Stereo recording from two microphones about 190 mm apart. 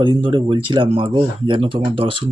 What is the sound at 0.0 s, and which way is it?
Speech, 25° right (ahead or behind).